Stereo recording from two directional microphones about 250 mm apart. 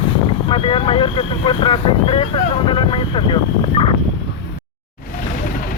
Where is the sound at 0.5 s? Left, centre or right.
Left.